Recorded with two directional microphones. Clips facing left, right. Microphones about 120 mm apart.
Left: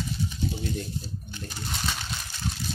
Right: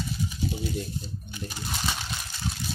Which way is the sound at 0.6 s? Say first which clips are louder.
Even; 5° right (ahead or behind).